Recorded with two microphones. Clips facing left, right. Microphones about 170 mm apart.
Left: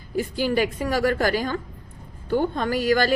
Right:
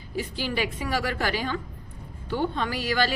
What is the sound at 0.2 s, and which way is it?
A woman's voice, 45° left (ahead or behind).